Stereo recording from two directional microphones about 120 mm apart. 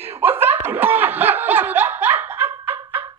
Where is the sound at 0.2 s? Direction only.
15° right (ahead or behind).